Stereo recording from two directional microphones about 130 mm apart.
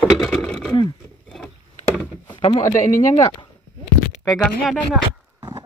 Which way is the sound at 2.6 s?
85° left.